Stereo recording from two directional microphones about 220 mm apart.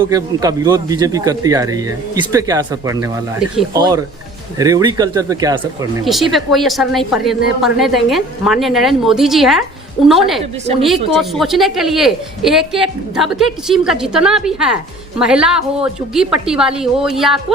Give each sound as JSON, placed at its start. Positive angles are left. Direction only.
{"t": 0.0, "sound": "speech", "side_deg": -15}
{"t": 6.1, "sound": "a woman's voice", "side_deg": 0}